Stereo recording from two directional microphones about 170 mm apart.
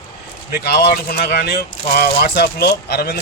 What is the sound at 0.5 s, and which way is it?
Speech, 75° left (ahead or behind).